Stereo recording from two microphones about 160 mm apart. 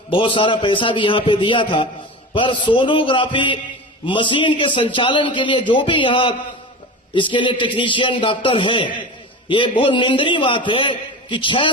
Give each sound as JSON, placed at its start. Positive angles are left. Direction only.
{"t": 0.1, "sound": "a man's voice", "side_deg": 30}